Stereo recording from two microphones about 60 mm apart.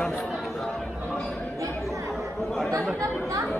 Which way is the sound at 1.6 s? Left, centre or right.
Right.